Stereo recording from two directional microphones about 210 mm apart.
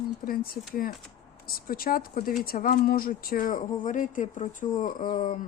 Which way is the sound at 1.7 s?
45° left (ahead or behind).